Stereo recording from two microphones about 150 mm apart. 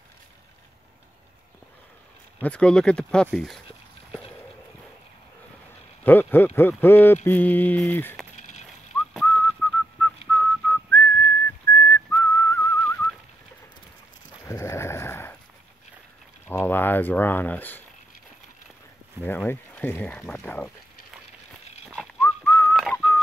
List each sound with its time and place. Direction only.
2.4 s speech: 5° left (ahead or behind)
6.0 s speech: 15° left (ahead or behind)
9.2 s whistling: 10° left (ahead or behind)
14.4 s a sound: 20° left (ahead or behind)
16.4 s a sound: 15° left (ahead or behind)
19.2 s speech: 15° left (ahead or behind)
22.2 s whistling: 15° left (ahead or behind)